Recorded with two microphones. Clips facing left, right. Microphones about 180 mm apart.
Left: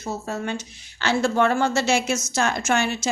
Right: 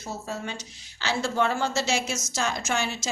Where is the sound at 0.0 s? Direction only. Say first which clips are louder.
Left 5 dB; 55° left (ahead or behind).